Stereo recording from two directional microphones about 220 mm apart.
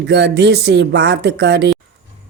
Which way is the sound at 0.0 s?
50° right (ahead or behind).